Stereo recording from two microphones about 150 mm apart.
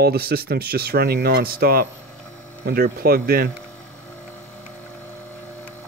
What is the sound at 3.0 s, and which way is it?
Speech, 90° right.